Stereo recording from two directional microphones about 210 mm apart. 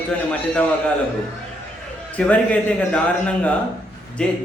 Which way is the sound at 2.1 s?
5° left (ahead or behind).